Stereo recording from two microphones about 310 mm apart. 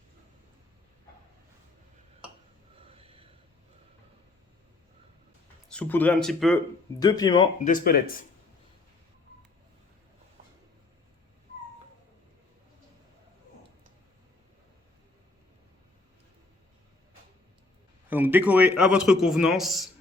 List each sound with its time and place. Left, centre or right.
2.7 s snort: centre
5.6 s a man's voice: centre
7.0 s speech: centre
7.6 s speech: left
18.1 s a man's voice: centre